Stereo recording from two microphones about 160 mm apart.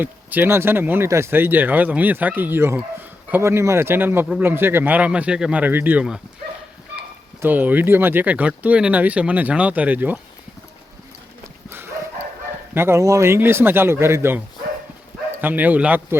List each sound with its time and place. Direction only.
0.0 s speech: 10° right (ahead or behind)
7.4 s speech: 10° right (ahead or behind)
12.7 s speech: 15° right (ahead or behind)